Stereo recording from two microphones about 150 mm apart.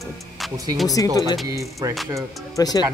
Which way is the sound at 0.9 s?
25° left (ahead or behind).